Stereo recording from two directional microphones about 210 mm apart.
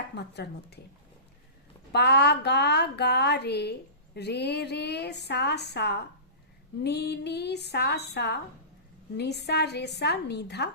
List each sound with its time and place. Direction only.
0.2 s speech: 50° left (ahead or behind)
1.9 s speech: 50° left (ahead or behind)